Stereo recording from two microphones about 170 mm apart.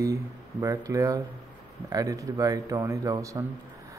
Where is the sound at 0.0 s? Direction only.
20° right (ahead or behind).